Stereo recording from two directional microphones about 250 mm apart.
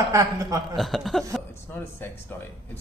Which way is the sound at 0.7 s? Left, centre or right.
Centre.